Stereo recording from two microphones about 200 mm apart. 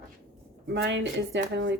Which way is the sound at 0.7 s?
60° right (ahead or behind).